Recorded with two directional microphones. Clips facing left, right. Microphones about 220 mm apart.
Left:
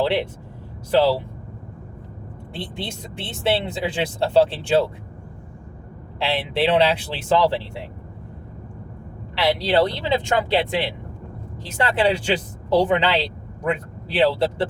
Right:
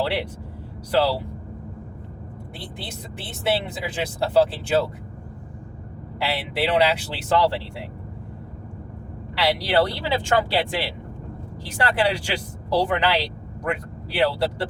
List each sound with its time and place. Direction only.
0.0 s speech: 25° left (ahead or behind)
2.5 s speech: 25° left (ahead or behind)
6.1 s speech: 25° left (ahead or behind)
9.3 s speech: 25° left (ahead or behind)